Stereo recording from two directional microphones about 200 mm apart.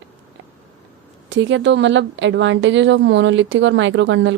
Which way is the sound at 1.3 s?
65° right (ahead or behind).